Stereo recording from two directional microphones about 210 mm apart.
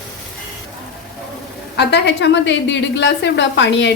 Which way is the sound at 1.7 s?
55° left (ahead or behind).